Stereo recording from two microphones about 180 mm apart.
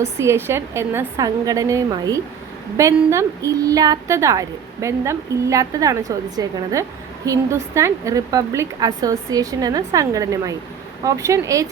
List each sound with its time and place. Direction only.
0.0 s a woman's voice: 15° right (ahead or behind)